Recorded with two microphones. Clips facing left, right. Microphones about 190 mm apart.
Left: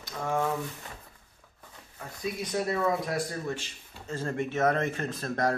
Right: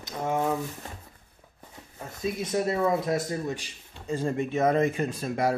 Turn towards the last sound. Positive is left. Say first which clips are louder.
# right 2 dB
turn(degrees=-10)  # may be behind; listen again after turning